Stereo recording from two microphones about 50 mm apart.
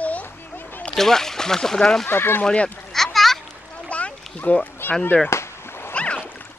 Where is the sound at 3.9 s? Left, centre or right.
Left.